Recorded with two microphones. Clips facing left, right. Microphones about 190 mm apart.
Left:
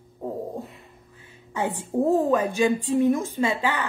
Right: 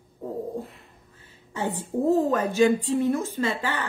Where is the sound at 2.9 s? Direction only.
15° left (ahead or behind).